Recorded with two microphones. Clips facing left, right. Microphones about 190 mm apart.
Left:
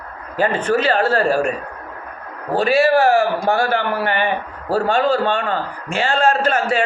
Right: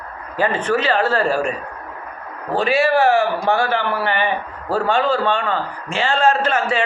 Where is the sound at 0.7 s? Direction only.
40° left (ahead or behind).